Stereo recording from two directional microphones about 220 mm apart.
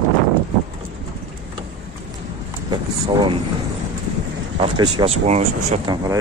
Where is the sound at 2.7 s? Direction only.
20° right (ahead or behind).